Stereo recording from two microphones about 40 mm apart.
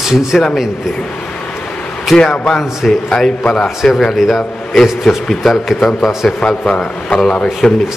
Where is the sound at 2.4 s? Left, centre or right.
Centre.